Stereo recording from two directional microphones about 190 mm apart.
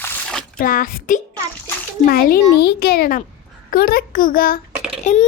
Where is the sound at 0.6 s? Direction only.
50° left (ahead or behind).